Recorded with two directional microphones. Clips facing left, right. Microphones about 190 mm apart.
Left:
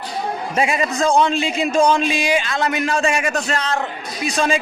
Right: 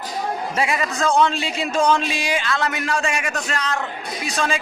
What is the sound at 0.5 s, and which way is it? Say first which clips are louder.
A man's voice: left 5 dB; 20° left (ahead or behind).